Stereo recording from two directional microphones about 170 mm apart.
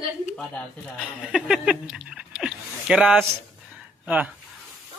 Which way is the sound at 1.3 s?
5° right (ahead or behind).